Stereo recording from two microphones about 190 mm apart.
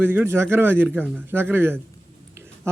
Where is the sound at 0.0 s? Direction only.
10° right (ahead or behind).